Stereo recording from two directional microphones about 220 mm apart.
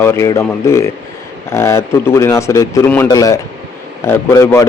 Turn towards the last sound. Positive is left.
turn(degrees=15)  # may be behind; listen again after turning